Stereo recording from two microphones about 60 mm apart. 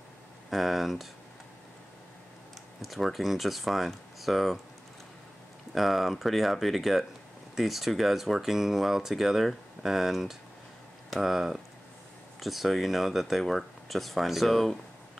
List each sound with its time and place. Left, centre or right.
0.5 s speech: centre
2.8 s speech: centre
5.8 s speech: centre